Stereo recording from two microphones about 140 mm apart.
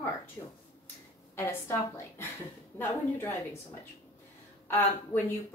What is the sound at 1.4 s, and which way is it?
A woman's voice, 20° left (ahead or behind).